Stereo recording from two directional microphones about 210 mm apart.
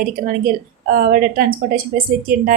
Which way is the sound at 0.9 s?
45° right (ahead or behind).